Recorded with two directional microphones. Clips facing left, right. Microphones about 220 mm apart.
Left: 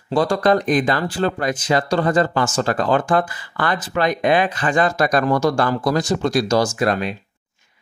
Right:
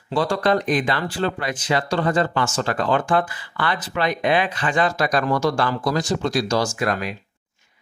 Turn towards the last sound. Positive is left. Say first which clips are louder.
# left 4 dB
turn(degrees=30)  # may be behind; listen again after turning